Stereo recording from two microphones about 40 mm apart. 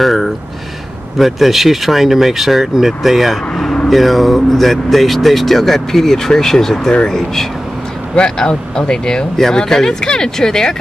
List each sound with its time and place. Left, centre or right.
0.0 s speech: centre